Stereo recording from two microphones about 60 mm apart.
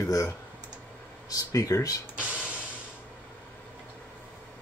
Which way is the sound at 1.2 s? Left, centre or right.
Left.